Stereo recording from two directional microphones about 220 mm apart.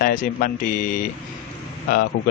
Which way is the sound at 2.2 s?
70° left (ahead or behind).